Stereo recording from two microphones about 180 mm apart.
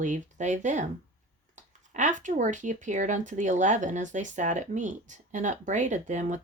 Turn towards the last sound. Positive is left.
turn(degrees=-40)  # may be behind; listen again after turning